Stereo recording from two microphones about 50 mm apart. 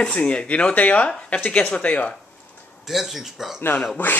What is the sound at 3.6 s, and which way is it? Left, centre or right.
Speech, left.